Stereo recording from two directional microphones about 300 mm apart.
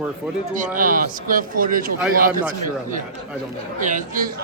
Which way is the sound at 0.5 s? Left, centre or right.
Right.